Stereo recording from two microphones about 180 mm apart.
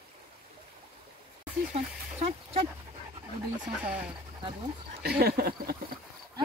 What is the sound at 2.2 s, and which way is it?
Speech, 35° right (ahead or behind).